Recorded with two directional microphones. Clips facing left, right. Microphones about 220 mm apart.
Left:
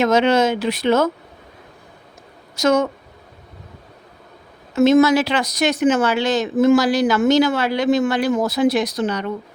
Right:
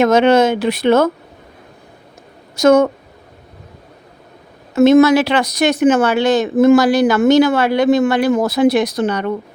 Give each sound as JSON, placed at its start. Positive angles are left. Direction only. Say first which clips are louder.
{"t": 0.0, "sound": "speech", "louder": "right 4 dB", "side_deg": -55}
{"t": 2.6, "sound": "speech", "louder": "right 6 dB", "side_deg": -55}
{"t": 4.7, "sound": "speech", "louder": "right 4 dB", "side_deg": -60}